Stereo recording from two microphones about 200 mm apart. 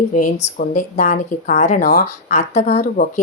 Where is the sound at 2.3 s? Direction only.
35° left (ahead or behind).